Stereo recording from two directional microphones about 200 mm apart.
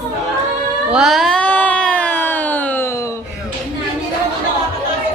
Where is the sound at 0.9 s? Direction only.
Centre (ahead or behind).